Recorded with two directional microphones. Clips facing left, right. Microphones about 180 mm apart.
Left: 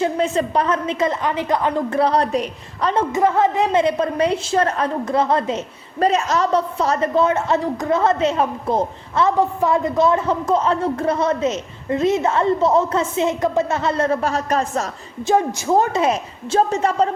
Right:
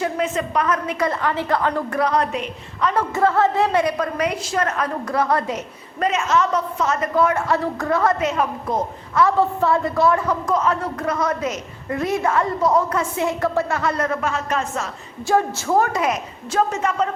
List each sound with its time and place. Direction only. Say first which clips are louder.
0.0 s a woman's voice: left 3 dB; 30° left (ahead or behind)
2.0 s a woman's voice: left 4 dB; 30° left (ahead or behind)
2.9 s a woman's voice: left 2 dB; 20° left (ahead or behind); by 14.8 s 35° left (ahead or behind)
15.3 s a woman's voice: left 2 dB; 15° left (ahead or behind)